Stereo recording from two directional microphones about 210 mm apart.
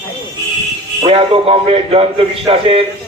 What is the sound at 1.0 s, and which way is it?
A man's voice, 25° right (ahead or behind).